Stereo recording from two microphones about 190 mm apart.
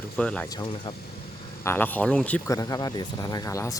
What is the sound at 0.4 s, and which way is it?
Speech, 20° left (ahead or behind).